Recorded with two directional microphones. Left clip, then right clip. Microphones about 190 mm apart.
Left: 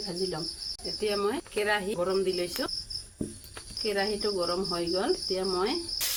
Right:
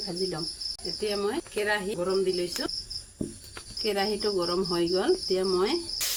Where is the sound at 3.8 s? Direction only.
55° right (ahead or behind).